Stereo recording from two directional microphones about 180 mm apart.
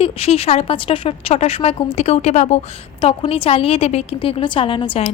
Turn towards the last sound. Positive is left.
turn(degrees=30)  # may be behind; listen again after turning